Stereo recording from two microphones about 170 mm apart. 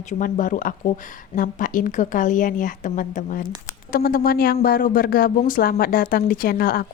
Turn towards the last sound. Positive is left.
turn(degrees=60)  # may be behind; listen again after turning